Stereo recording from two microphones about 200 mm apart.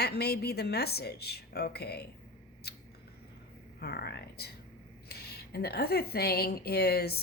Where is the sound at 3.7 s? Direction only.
55° left (ahead or behind).